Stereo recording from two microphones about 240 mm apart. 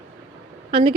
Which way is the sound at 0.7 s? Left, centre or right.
Right.